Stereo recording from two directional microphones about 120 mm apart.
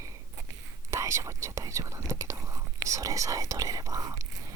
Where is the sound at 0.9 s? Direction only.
25° right (ahead or behind).